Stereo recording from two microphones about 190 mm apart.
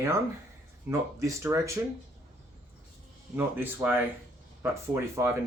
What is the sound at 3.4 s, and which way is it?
Speech, 10° right (ahead or behind).